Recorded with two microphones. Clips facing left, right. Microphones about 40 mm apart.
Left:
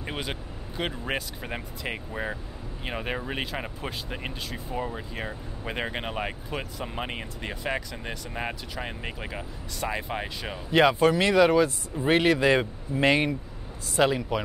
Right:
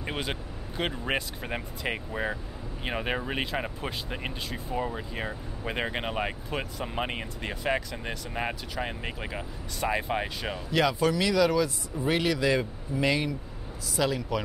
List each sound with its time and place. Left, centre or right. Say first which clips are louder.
0.0 s speech: right 1 dB; centre
10.7 s speech: left 5 dB; left